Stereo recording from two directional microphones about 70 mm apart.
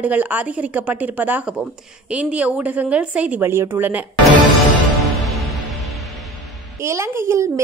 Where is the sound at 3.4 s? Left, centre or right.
Right.